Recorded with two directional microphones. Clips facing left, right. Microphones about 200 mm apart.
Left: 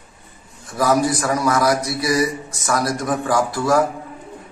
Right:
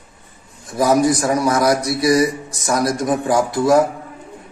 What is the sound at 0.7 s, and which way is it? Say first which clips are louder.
A man's voice: right 3 dB; 25° right (ahead or behind).